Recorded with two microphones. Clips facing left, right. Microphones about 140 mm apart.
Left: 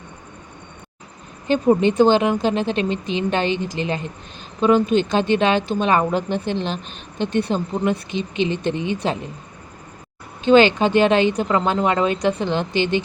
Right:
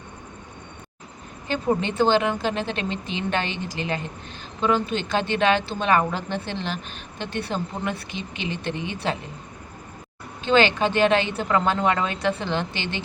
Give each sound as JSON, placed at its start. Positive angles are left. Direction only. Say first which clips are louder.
{"t": 1.5, "sound": "a woman's voice", "louder": "left 8 dB", "side_deg": 15}
{"t": 10.4, "sound": "a woman's voice", "louder": "left 6 dB", "side_deg": 15}